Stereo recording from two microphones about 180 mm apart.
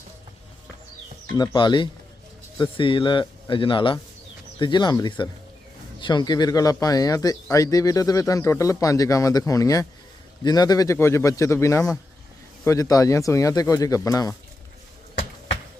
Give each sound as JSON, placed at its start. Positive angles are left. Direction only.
{"t": 1.4, "sound": "a man's voice", "side_deg": 25}